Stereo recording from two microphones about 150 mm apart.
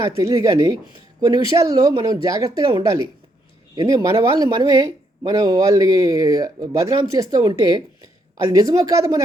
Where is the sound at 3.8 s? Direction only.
25° right (ahead or behind).